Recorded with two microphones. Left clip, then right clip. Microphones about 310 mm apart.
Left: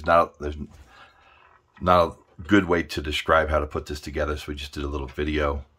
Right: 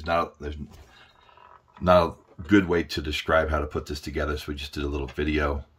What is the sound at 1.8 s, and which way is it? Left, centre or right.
Speech, centre.